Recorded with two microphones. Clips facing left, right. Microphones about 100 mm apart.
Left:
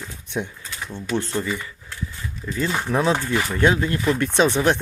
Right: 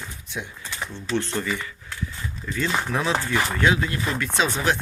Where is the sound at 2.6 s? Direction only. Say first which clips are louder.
Left 3 dB; 20° left (ahead or behind).